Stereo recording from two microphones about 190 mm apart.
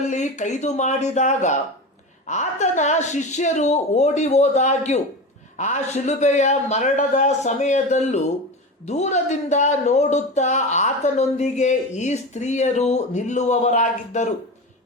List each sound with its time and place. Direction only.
0.1 s speech: 40° left (ahead or behind)